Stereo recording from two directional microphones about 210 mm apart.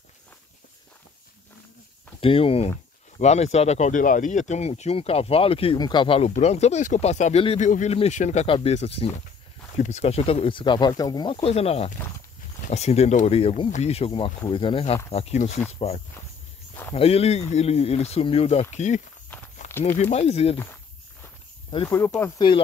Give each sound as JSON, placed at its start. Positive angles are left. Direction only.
{"t": 2.1, "sound": "speech", "side_deg": 25}
{"t": 16.9, "sound": "speech", "side_deg": 30}
{"t": 19.6, "sound": "a sound", "side_deg": 35}
{"t": 20.0, "sound": "speech", "side_deg": 30}
{"t": 21.8, "sound": "speech", "side_deg": 10}